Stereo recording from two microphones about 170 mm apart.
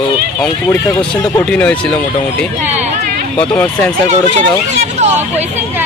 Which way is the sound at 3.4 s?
10° left (ahead or behind).